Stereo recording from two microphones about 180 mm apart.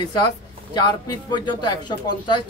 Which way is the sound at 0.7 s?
25° left (ahead or behind).